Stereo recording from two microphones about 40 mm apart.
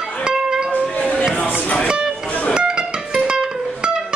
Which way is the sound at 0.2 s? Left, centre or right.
Right.